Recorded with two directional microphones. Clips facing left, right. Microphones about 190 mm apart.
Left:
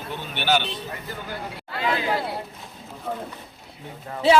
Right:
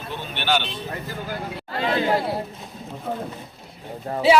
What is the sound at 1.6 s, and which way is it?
Chatter, 40° right (ahead or behind).